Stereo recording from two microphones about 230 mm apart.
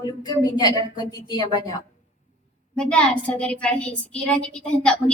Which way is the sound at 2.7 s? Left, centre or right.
Centre.